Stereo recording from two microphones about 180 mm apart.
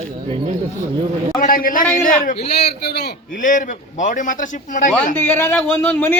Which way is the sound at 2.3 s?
65° left (ahead or behind).